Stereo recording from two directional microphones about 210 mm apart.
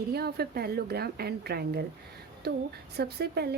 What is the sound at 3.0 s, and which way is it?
Speech, 50° right (ahead or behind).